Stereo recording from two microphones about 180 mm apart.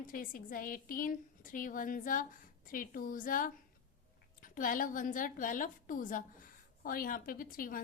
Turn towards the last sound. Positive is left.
turn(degrees=50)  # may be behind; listen again after turning